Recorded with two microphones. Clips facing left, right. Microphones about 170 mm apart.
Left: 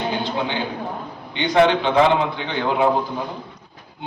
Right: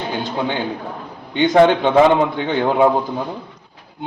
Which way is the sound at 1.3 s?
45° right (ahead or behind).